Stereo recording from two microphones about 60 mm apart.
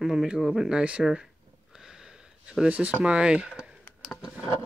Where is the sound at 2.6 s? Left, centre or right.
Right.